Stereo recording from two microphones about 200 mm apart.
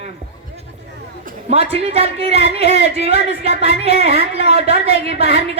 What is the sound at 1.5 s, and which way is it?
Speech, 30° right (ahead or behind).